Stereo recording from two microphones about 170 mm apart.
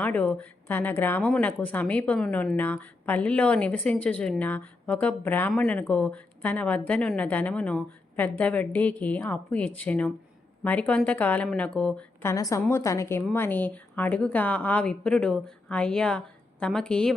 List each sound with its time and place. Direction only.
0.0 s speech: 10° left (ahead or behind)
12.2 s speech: 15° left (ahead or behind)